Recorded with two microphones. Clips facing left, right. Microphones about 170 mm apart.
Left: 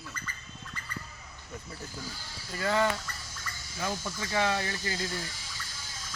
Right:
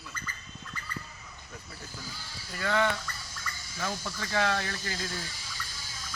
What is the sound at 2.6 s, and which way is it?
Speech, 5° left (ahead or behind).